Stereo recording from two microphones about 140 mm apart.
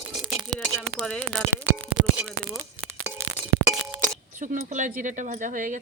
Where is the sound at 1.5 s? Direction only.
10° right (ahead or behind).